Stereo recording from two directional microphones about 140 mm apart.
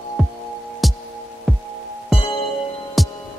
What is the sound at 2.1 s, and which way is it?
Music, 40° left (ahead or behind).